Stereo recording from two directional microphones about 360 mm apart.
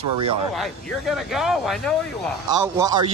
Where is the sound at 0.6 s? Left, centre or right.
Centre.